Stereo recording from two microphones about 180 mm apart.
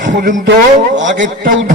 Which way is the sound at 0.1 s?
45° right (ahead or behind).